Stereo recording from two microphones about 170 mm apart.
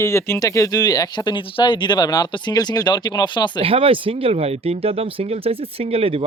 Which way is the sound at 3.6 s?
35° right (ahead or behind).